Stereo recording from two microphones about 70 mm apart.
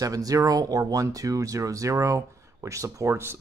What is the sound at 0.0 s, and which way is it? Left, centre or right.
Speech, right.